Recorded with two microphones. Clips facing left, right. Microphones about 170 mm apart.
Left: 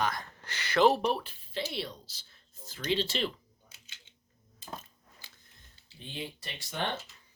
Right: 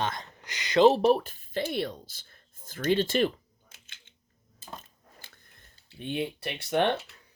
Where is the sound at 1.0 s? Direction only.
45° right (ahead or behind).